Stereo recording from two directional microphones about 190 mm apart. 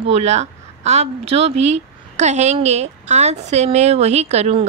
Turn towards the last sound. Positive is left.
turn(degrees=-35)  # may be behind; listen again after turning